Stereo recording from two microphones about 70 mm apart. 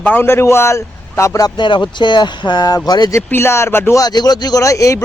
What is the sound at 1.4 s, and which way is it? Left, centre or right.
Speech, left.